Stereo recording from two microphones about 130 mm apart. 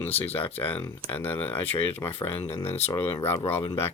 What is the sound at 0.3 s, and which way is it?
Speech, 15° left (ahead or behind).